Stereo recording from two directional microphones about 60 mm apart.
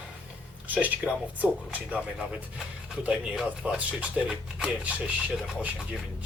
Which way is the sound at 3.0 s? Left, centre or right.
Centre.